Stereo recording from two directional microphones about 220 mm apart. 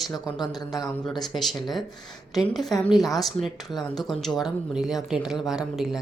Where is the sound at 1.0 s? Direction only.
Centre (ahead or behind).